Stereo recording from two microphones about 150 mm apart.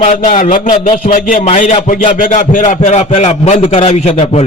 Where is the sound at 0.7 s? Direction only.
35° left (ahead or behind).